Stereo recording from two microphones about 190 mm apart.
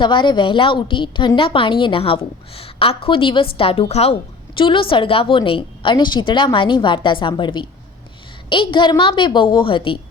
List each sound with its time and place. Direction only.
0.0 s a woman's voice: 25° left (ahead or behind)